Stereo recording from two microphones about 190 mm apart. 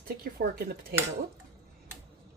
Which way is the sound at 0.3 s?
55° right (ahead or behind).